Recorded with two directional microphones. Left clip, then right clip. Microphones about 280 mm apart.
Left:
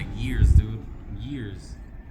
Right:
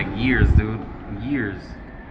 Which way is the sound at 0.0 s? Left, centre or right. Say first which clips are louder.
Right 13 dB; left.